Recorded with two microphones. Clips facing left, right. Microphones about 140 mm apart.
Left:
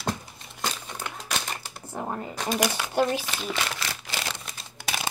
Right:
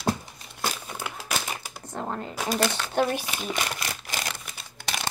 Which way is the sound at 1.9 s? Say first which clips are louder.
Even; 10° left (ahead or behind).